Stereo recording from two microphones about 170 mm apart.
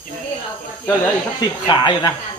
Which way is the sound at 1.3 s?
25° left (ahead or behind).